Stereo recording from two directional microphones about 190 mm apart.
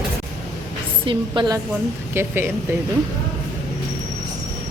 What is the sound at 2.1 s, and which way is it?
Speech, 10° right (ahead or behind).